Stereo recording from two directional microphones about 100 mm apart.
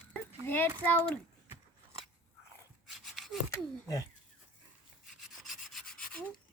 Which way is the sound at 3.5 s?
35° left (ahead or behind).